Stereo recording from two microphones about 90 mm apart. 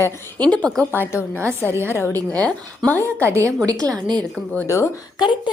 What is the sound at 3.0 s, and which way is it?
Speech, 30° right (ahead or behind).